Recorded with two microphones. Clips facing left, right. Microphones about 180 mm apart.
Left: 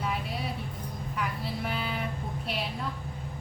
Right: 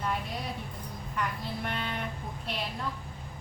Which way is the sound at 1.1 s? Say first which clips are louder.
Even; 5° left (ahead or behind).